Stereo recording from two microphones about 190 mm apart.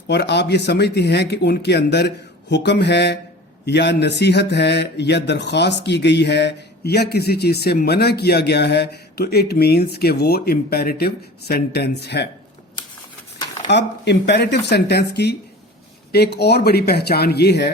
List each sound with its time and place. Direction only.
0.1 s speech: 60° left (ahead or behind)
13.7 s speech: 65° left (ahead or behind)